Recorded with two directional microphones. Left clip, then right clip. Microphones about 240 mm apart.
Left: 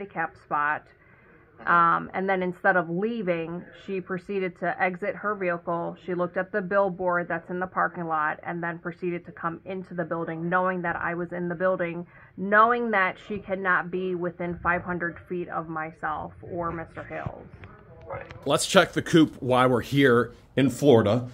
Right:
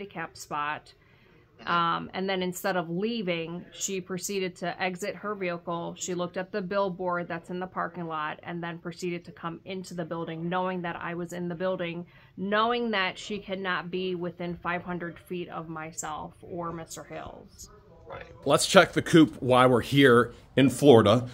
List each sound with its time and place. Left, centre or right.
0.0 s a woman's voice: right
18.4 s speech: centre